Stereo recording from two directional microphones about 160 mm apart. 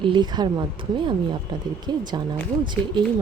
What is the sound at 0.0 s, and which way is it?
Speech, 30° right (ahead or behind).